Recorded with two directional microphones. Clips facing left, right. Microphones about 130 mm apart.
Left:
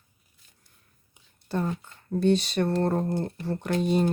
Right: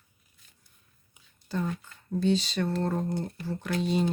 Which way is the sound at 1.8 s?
60° left (ahead or behind).